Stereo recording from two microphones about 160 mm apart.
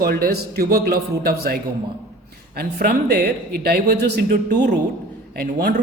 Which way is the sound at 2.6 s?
70° right (ahead or behind).